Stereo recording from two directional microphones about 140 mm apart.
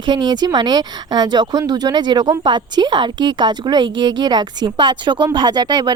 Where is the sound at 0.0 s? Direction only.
35° right (ahead or behind).